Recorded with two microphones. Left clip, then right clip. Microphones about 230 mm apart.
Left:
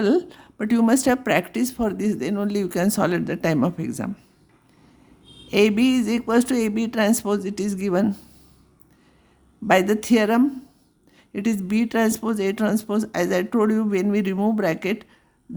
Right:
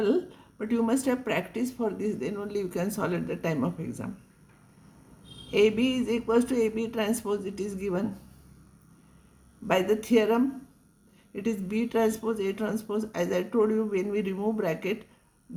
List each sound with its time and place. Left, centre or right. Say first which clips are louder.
0.0 s a woman's voice: left 6 dB; left
5.5 s a woman's voice: left 5 dB; left
9.6 s a woman's voice: left 7 dB; left